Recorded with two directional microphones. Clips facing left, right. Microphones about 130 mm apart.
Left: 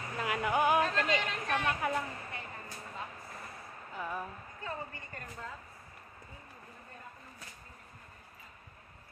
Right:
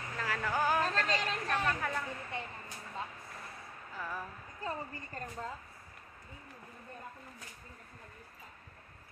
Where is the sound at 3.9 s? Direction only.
10° left (ahead or behind).